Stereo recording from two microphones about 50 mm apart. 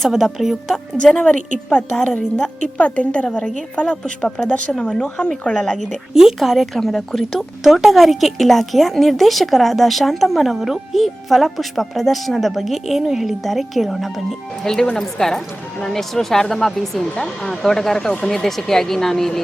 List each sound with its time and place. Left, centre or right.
0.1 s a woman's voice: centre
1.0 s a woman's voice: centre
6.1 s a woman's voice: centre